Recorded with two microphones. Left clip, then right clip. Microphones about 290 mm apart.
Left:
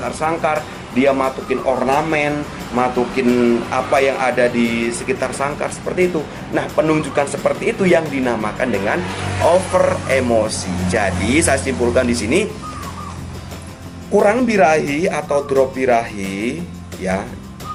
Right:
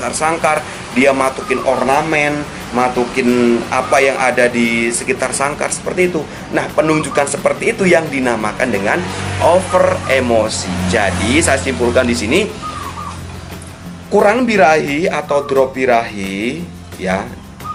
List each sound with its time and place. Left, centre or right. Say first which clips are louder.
0.0 s speech: right 4 dB; centre
14.2 s speech: right 3 dB; centre
15.3 s music: right 2 dB; left
15.8 s speech: right 3 dB; centre